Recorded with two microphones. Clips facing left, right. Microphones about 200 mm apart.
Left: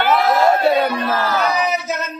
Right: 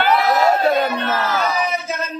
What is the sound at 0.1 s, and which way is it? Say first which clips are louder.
Crowd: left 2 dB; 5° left (ahead or behind).